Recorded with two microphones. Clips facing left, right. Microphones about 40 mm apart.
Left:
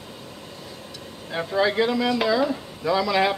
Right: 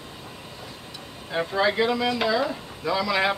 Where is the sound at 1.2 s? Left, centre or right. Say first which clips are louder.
Left 1 dB; centre.